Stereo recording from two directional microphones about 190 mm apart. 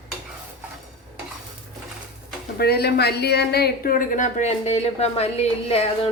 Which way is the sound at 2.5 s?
55° left (ahead or behind).